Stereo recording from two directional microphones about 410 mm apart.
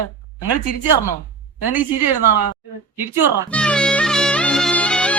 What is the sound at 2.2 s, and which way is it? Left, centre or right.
Speech, right.